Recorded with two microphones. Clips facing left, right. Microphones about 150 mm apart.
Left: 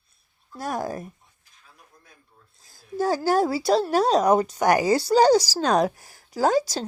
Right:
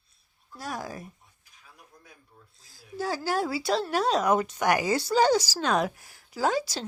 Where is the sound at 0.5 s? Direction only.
50° left (ahead or behind).